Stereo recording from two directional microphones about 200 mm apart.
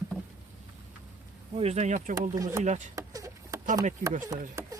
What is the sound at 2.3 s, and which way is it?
Speech, 15° right (ahead or behind).